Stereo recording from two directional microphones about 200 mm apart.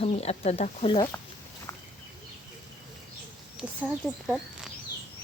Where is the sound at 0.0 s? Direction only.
30° left (ahead or behind).